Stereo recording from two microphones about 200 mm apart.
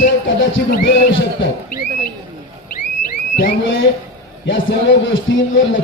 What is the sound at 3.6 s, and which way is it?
A man's voice, 70° left (ahead or behind).